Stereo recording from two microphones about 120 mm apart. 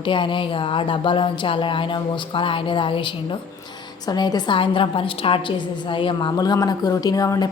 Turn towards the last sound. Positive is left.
turn(degrees=30)  # may be behind; listen again after turning